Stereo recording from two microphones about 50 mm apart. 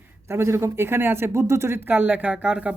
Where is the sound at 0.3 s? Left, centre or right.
Right.